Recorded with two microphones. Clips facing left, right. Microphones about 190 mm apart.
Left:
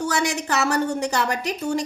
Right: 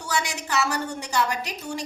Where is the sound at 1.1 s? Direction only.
65° left (ahead or behind).